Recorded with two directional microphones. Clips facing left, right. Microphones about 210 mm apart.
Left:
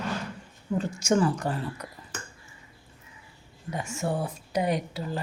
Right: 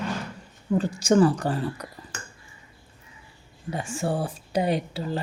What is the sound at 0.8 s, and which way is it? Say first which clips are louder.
Speech: right 5 dB; 35° right (ahead or behind).